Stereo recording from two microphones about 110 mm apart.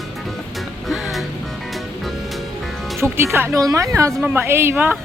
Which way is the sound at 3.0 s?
25° right (ahead or behind).